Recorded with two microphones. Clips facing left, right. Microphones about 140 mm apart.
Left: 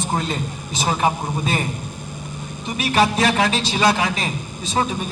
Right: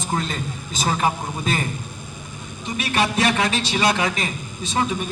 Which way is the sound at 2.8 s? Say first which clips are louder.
Left 3 dB; 30° left (ahead or behind).